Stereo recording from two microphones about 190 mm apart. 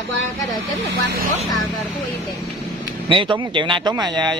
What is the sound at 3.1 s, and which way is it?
A man's voice, 25° right (ahead or behind).